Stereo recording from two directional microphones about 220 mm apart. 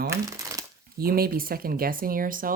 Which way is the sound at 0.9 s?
40° right (ahead or behind).